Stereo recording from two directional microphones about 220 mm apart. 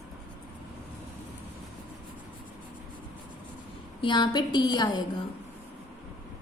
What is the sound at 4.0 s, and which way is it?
A woman's voice, 20° left (ahead or behind).